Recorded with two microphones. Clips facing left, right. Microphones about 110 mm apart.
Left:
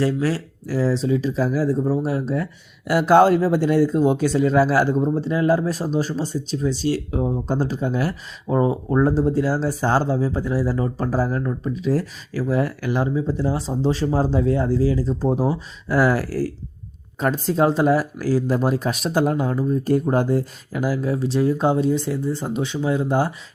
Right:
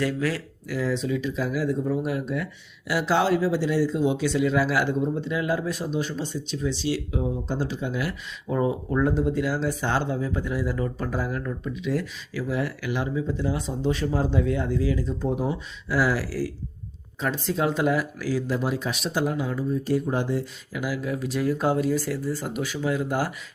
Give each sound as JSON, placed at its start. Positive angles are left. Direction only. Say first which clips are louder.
{"t": 0.0, "sound": "speech", "louder": "left 5 dB", "side_deg": 30}
{"t": 15.9, "sound": "speech", "louder": "left 5 dB", "side_deg": 50}